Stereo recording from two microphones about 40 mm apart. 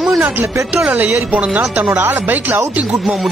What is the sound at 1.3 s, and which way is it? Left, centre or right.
Speech, right.